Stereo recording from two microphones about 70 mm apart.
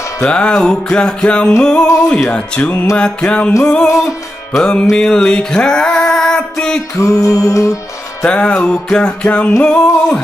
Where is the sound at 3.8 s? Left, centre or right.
Left.